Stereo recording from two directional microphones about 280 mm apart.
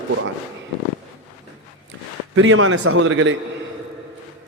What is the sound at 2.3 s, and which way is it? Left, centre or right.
A man's voice, right.